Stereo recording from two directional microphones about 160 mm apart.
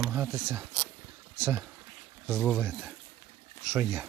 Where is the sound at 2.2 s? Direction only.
10° right (ahead or behind).